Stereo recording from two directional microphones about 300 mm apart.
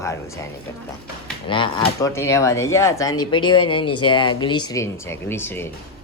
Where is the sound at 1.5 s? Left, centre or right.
Centre.